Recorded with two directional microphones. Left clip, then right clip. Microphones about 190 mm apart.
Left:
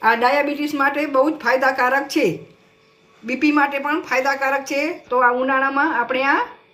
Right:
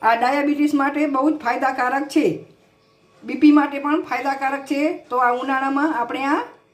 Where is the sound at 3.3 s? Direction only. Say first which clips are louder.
Right 2 dB; 35° right (ahead or behind).